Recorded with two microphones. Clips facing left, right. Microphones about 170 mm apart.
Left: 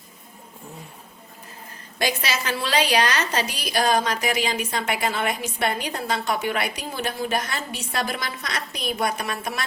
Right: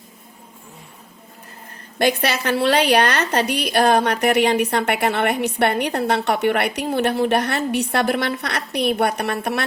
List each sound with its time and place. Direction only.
2.0 s a woman's voice: 60° right (ahead or behind)